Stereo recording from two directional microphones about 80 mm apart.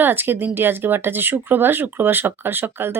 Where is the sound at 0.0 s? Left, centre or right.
Right.